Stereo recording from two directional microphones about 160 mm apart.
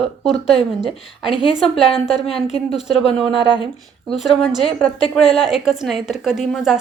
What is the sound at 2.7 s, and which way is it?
Speech, centre (ahead or behind).